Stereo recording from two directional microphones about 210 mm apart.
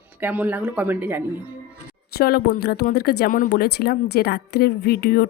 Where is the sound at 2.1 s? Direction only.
50° left (ahead or behind).